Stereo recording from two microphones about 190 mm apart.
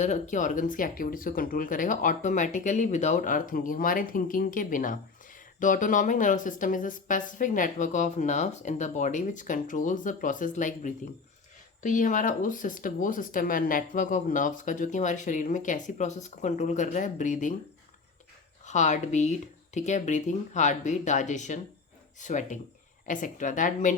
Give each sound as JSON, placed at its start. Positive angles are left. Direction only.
{"t": 0.0, "sound": "speech", "side_deg": 40}
{"t": 18.6, "sound": "speech", "side_deg": 40}